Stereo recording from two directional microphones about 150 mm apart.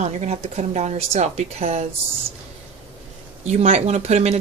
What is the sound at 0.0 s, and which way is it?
Speech, 45° right (ahead or behind).